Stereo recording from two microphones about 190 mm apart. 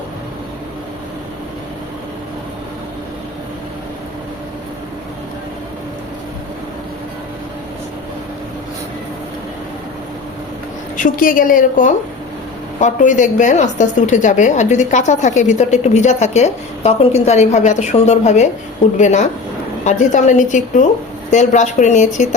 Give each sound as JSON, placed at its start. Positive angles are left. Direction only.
{"t": 10.9, "sound": "a woman's voice", "side_deg": 45}